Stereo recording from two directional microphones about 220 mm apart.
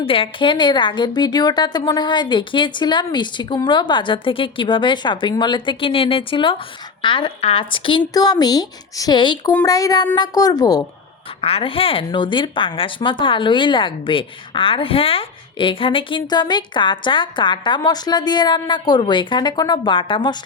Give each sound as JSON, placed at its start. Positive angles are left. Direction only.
{"t": 0.0, "sound": "a woman's voice", "side_deg": 25}